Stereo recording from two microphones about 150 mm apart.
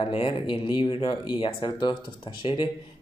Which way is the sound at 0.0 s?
35° left (ahead or behind).